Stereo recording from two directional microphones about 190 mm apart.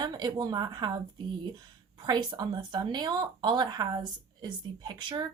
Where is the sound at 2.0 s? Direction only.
20° right (ahead or behind).